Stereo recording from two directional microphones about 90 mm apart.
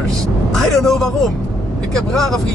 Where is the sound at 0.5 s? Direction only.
5° left (ahead or behind).